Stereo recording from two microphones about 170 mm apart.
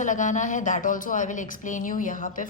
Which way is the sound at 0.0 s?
50° left (ahead or behind).